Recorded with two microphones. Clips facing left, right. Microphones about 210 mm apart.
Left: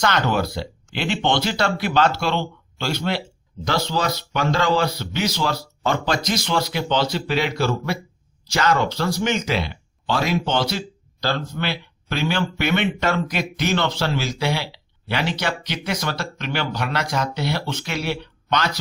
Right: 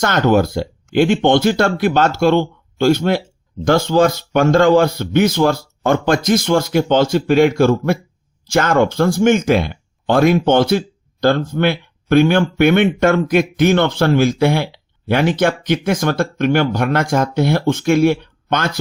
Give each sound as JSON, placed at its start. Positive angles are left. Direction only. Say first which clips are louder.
{"t": 0.0, "sound": "speech", "louder": "right 7 dB", "side_deg": -50}